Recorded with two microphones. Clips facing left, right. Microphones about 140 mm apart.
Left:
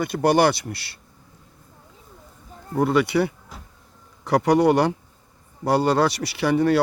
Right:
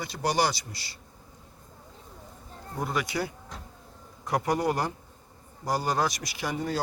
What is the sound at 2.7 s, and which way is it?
Speech, 65° left (ahead or behind).